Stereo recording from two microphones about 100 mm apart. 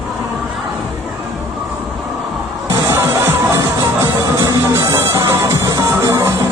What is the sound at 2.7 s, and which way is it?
Music, 35° right (ahead or behind).